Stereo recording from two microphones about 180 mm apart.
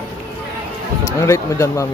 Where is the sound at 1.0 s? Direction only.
15° left (ahead or behind).